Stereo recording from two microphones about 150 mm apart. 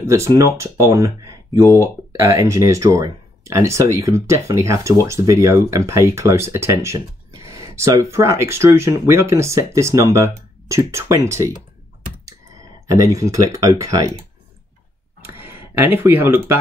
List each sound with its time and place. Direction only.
0.0 s speech: 20° right (ahead or behind)
12.9 s speech: 20° right (ahead or behind)
15.2 s speech: 15° right (ahead or behind)